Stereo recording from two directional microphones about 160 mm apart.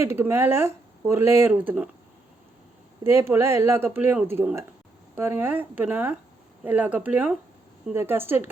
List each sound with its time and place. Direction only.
0.0 s speech: 15° right (ahead or behind)
3.0 s speech: 15° right (ahead or behind)